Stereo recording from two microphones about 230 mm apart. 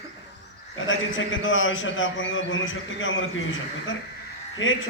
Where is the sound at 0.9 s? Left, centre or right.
Left.